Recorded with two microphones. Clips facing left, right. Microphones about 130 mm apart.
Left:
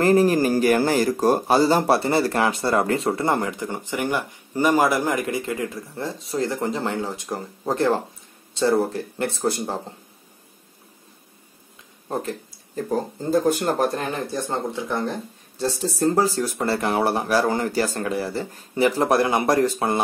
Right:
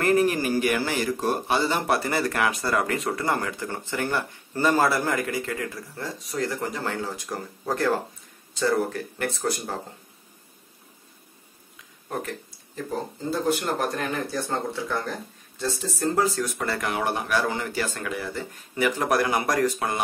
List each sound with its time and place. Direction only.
0.0 s speech: 35° left (ahead or behind)
12.1 s speech: 30° left (ahead or behind)
13.3 s speech: 40° left (ahead or behind); by 15.1 s 20° left (ahead or behind)
15.5 s speech: 35° left (ahead or behind)